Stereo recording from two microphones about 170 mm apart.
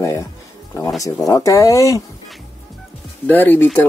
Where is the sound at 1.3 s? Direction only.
20° left (ahead or behind).